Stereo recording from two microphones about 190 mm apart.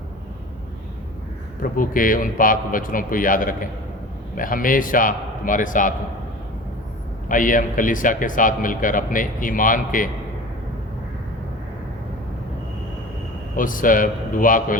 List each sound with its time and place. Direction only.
1.7 s speech: 45° left (ahead or behind)
7.3 s speech: 45° left (ahead or behind)
13.6 s speech: 45° left (ahead or behind)